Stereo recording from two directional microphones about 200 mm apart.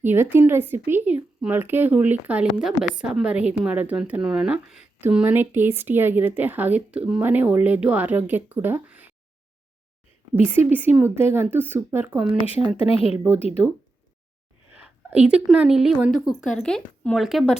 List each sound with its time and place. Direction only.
0.0 s a woman's voice: 10° right (ahead or behind)
10.7 s a woman's voice: 10° right (ahead or behind)
12.5 s speech: 30° left (ahead or behind)
14.7 s a woman's voice: 5° right (ahead or behind)